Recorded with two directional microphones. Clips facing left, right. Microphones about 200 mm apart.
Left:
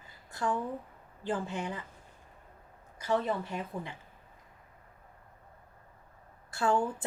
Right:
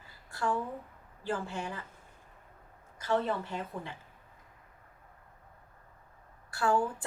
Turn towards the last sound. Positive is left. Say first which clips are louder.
# even
turn(degrees=20)  # may be behind; listen again after turning